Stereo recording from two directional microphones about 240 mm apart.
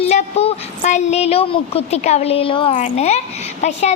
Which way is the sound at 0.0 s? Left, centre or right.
Left.